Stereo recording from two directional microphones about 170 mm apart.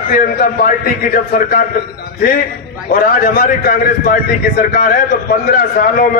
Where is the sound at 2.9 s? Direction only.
60° left (ahead or behind).